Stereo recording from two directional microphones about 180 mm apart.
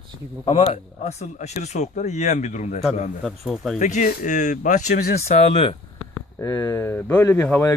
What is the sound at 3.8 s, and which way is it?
Speech, 45° left (ahead or behind).